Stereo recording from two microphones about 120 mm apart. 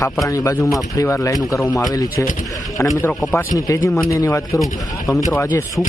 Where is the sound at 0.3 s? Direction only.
25° left (ahead or behind).